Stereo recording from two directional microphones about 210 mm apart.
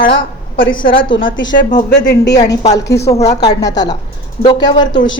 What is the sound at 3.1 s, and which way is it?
Speech, 30° left (ahead or behind).